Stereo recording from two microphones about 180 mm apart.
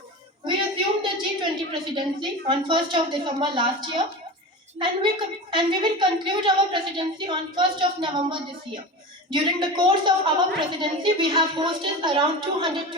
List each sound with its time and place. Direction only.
1.0 s a woman's voice: 25° right (ahead or behind)